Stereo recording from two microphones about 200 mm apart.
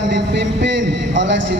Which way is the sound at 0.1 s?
60° right (ahead or behind).